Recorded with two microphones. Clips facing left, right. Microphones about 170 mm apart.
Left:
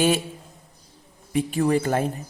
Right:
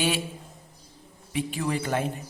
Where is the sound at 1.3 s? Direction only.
45° left (ahead or behind).